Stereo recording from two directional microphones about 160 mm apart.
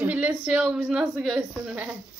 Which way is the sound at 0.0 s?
10° right (ahead or behind).